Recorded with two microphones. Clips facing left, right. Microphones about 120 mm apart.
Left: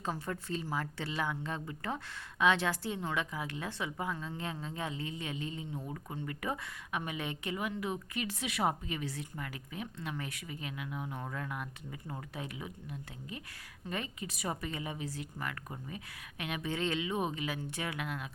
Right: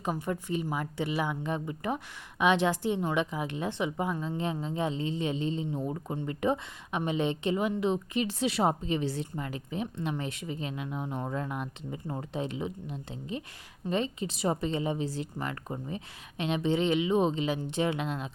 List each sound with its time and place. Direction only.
0.0 s a woman's voice: 15° right (ahead or behind)